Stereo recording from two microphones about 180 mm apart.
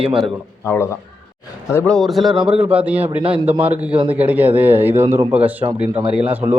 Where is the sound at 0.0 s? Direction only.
5° right (ahead or behind).